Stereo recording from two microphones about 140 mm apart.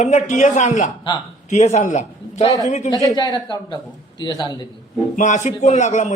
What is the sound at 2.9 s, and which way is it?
Speech, 30° left (ahead or behind).